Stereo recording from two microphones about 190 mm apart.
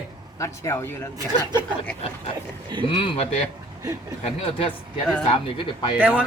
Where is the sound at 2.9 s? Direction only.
30° left (ahead or behind).